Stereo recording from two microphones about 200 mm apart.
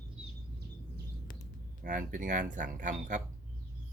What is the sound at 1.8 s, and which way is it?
Speech, 40° right (ahead or behind).